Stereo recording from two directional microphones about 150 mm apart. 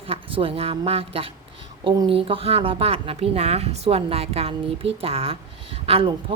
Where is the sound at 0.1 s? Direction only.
35° right (ahead or behind).